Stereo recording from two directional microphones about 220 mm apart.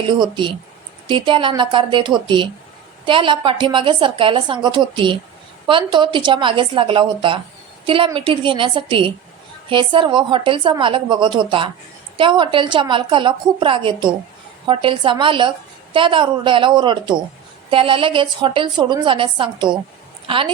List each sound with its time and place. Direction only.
0.1 s a woman's voice: 20° right (ahead or behind)